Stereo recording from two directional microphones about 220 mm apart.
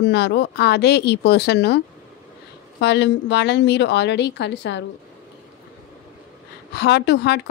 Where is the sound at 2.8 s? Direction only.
50° left (ahead or behind).